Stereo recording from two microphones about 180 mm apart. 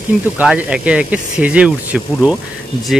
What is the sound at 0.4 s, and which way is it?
Speech, 5° right (ahead or behind).